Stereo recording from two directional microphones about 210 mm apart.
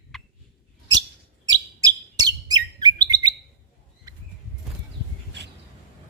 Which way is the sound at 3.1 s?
20° right (ahead or behind).